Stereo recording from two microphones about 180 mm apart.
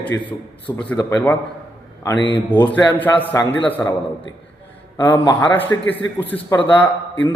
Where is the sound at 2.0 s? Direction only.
25° left (ahead or behind).